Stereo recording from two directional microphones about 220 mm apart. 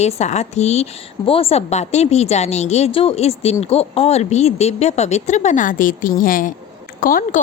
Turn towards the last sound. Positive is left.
turn(degrees=40)  # may be behind; listen again after turning